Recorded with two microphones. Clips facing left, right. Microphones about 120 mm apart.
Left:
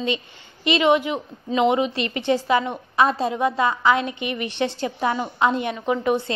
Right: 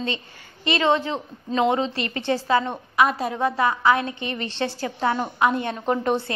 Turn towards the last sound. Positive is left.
turn(degrees=5)  # may be behind; listen again after turning